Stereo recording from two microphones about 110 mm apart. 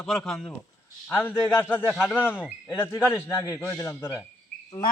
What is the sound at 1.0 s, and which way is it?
Speech, 15° left (ahead or behind).